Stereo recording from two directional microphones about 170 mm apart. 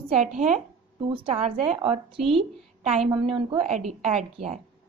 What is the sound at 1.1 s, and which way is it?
A woman's voice, 30° right (ahead or behind).